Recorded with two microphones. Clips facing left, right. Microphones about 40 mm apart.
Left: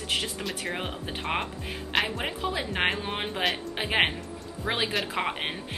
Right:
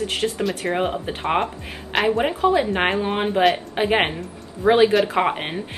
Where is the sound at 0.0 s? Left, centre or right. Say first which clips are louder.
Right 8 dB; centre.